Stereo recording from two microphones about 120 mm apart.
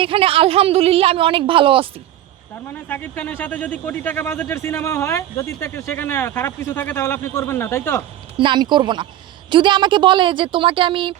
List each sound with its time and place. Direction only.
0.0 s speech: 50° right (ahead or behind)
2.9 s a man's voice: 15° left (ahead or behind)
8.4 s speech: 40° right (ahead or behind)